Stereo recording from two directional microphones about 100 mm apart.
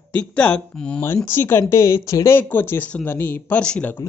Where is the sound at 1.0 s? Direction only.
25° left (ahead or behind).